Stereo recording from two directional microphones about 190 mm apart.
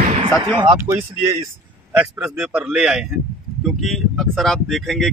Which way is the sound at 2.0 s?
5° right (ahead or behind).